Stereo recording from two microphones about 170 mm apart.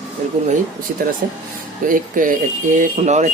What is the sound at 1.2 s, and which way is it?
Speech, 60° right (ahead or behind).